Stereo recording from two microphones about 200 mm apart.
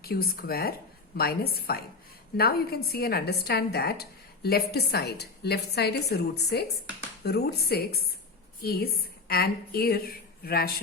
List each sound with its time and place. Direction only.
0.0 s a woman's voice: 50° left (ahead or behind)